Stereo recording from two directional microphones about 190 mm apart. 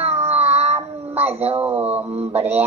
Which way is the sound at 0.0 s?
35° right (ahead or behind).